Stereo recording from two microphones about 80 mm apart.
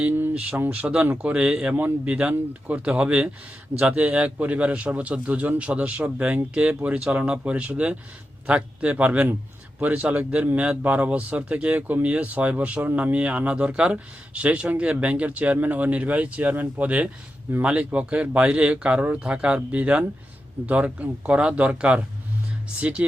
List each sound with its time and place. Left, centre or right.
0.3 s speech: centre